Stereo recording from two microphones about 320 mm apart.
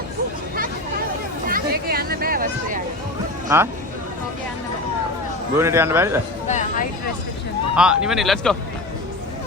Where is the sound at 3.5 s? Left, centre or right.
Centre.